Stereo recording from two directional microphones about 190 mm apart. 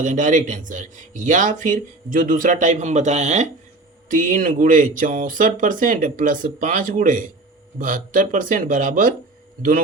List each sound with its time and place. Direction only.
0.0 s speech: 40° right (ahead or behind)